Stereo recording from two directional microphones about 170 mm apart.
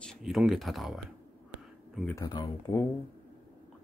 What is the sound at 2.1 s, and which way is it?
Speech, 25° left (ahead or behind).